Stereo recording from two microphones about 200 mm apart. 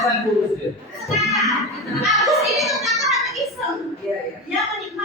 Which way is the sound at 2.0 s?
Centre (ahead or behind).